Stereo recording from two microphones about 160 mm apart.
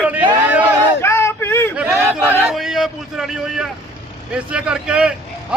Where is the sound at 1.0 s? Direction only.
15° left (ahead or behind).